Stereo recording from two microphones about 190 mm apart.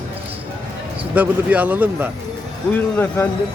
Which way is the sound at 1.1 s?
10° right (ahead or behind).